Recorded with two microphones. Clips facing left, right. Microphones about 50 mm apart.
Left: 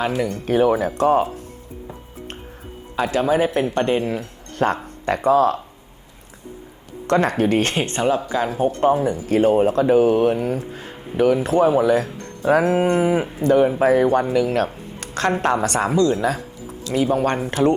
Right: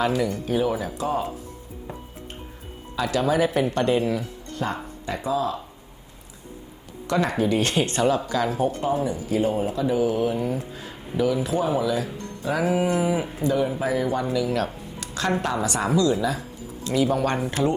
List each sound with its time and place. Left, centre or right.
0.0 s speech: left
0.3 s speech: left
2.9 s speech: left
7.1 s speech: left
8.8 s speech: left